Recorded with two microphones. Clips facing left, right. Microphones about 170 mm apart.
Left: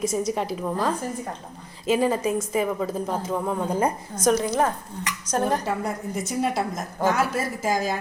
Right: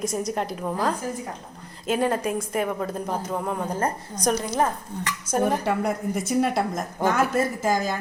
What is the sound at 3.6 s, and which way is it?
Speech, 10° left (ahead or behind).